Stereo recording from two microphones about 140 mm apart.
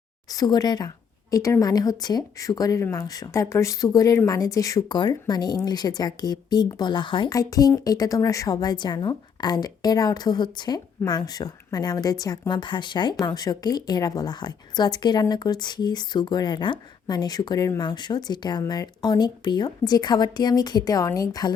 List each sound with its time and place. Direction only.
0.3 s a woman's voice: 25° left (ahead or behind)